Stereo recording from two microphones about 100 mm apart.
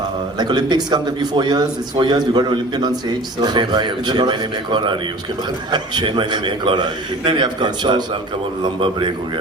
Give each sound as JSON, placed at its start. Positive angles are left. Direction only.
{"t": 0.3, "sound": "a man's voice", "side_deg": -45}